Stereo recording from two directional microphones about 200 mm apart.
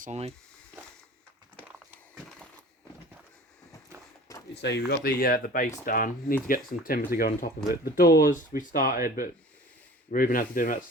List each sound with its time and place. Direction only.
0.0 s speech: 35° right (ahead or behind)
4.6 s speech: 55° left (ahead or behind)